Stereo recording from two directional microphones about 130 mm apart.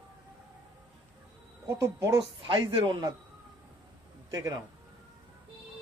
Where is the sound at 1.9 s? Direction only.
25° right (ahead or behind).